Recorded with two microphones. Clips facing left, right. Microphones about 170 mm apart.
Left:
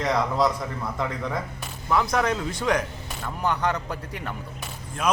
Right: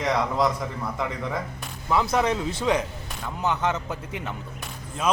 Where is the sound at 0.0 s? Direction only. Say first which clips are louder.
Even; centre (ahead or behind).